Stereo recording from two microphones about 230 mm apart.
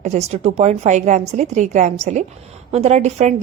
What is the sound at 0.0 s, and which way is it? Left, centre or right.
A woman's voice, right.